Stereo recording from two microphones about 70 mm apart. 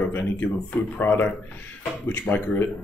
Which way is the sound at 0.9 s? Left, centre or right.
Left.